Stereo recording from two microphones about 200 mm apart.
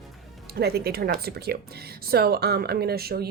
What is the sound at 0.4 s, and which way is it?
Speech, 55° right (ahead or behind).